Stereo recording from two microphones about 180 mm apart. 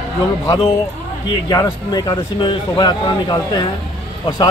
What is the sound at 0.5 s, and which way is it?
Speech, 30° left (ahead or behind).